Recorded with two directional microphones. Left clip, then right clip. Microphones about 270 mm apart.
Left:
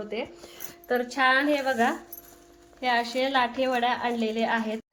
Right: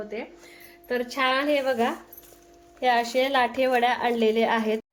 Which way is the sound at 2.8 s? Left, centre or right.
Right.